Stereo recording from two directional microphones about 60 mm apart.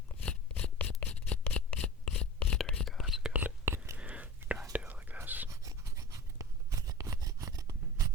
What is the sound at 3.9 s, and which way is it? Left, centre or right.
Whispering, right.